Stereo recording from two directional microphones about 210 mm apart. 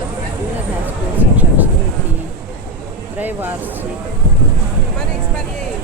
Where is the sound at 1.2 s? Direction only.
10° right (ahead or behind).